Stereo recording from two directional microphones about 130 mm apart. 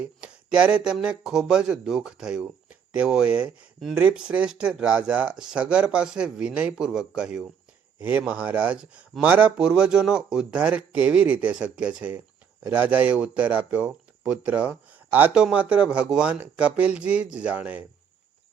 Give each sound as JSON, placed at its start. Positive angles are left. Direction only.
{"t": 0.0, "sound": "speech", "side_deg": -10}
{"t": 7.9, "sound": "speech", "side_deg": -15}